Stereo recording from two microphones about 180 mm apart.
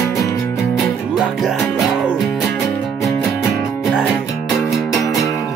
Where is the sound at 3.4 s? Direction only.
15° left (ahead or behind).